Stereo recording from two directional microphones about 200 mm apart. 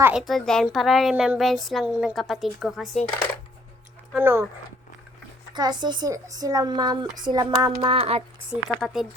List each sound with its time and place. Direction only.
0.0 s a woman's voice: 5° right (ahead or behind)
4.1 s speech: 10° right (ahead or behind)
5.5 s speech: 20° right (ahead or behind)
8.4 s a woman's voice: centre (ahead or behind)